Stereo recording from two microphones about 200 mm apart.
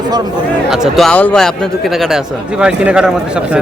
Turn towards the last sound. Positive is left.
turn(degrees=-5)  # may be behind; listen again after turning